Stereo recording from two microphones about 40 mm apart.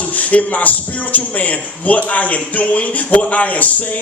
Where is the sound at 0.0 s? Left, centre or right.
Left.